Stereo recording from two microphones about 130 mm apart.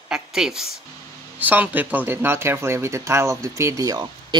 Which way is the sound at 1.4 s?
15° right (ahead or behind).